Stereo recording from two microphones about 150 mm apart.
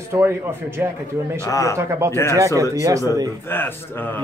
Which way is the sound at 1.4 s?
20° left (ahead or behind).